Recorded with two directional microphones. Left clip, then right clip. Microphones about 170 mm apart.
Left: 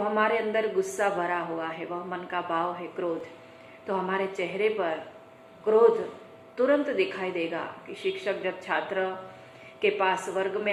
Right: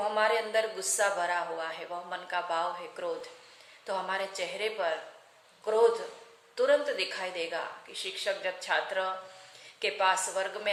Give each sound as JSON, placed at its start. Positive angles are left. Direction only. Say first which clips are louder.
{"t": 0.0, "sound": "a woman's voice", "louder": "left 2 dB", "side_deg": -35}